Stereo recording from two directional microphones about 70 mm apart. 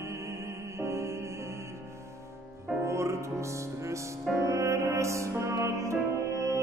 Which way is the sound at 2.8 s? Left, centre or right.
Right.